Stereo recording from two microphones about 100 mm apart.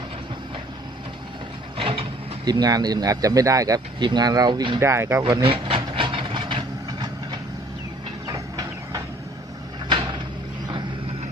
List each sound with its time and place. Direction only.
1.8 s vehicle: 70° right (ahead or behind)
2.4 s speech: 45° right (ahead or behind)
4.0 s speech: 45° right (ahead or behind)
4.8 s speech: 25° right (ahead or behind)
5.3 s wood: 60° right (ahead or behind)
8.3 s vehicle: 40° right (ahead or behind)